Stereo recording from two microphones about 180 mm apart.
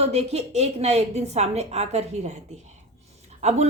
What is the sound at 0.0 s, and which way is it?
A woman's voice, 35° right (ahead or behind).